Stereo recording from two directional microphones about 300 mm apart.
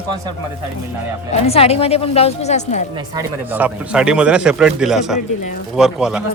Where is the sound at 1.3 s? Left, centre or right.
Centre.